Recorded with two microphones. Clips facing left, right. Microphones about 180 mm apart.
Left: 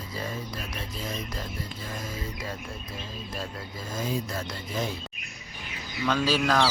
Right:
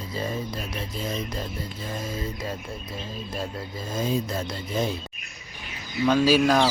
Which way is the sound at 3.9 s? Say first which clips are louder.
Right 4 dB; 25° right (ahead or behind).